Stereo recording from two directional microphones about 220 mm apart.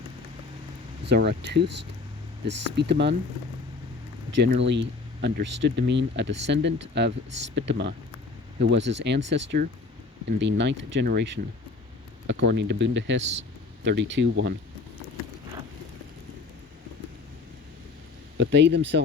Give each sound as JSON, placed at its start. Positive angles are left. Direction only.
{"t": 1.0, "sound": "speech", "side_deg": -50}
{"t": 4.4, "sound": "speech", "side_deg": -55}
{"t": 18.3, "sound": "speech", "side_deg": -55}